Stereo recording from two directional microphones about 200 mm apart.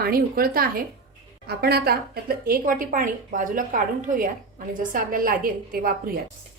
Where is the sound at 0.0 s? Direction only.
50° right (ahead or behind).